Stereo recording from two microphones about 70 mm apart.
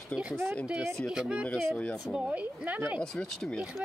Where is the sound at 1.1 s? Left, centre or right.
Centre.